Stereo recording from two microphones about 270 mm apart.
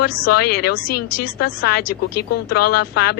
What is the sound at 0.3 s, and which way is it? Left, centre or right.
Speech, left.